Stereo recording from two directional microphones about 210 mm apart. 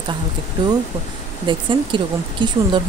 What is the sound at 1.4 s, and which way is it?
Speech, 20° right (ahead or behind).